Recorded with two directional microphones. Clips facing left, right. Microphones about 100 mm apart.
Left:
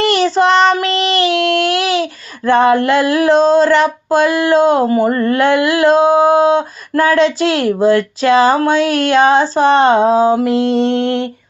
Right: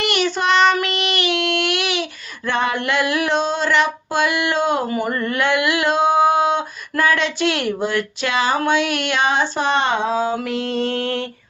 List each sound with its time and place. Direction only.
0.0 s child singing: 35° left (ahead or behind)